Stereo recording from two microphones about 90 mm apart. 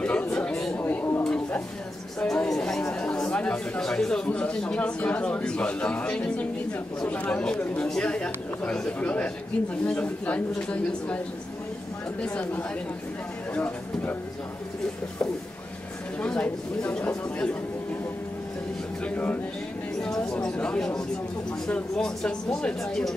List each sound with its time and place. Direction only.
0.0 s chatter: 15° left (ahead or behind)
0.7 s a sound: 20° left (ahead or behind)
2.1 s speech: 10° left (ahead or behind)
12.2 s speech: 15° left (ahead or behind)
16.2 s speech: 15° left (ahead or behind)
19.0 s speech: 15° left (ahead or behind)
20.0 s chatter: 5° left (ahead or behind)
21.6 s speech: 10° left (ahead or behind)